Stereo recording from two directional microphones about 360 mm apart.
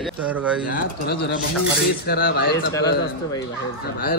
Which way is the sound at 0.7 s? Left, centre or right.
Left.